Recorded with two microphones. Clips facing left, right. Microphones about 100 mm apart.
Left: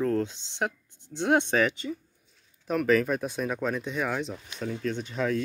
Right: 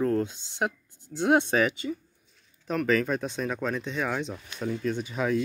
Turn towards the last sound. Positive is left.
turn(degrees=-10)  # may be behind; listen again after turning